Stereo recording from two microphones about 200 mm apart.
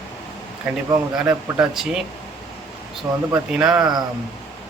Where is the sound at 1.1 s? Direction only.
5° right (ahead or behind).